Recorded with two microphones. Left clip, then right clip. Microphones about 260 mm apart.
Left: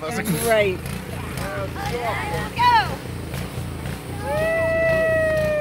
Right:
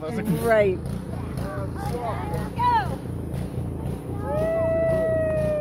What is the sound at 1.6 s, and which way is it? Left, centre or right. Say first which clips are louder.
Vehicle: left 4 dB; left.